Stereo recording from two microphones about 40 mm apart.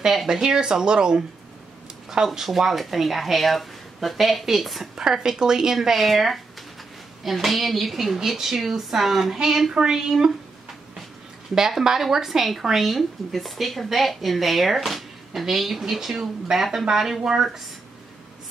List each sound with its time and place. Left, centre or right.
0.0 s speech: centre
0.3 s speech: centre
4.9 s speech: centre
5.8 s speech: centre
11.8 s speech: centre